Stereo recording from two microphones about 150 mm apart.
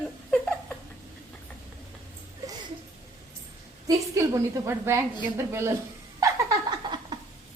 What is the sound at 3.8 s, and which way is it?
A woman's voice, 20° right (ahead or behind).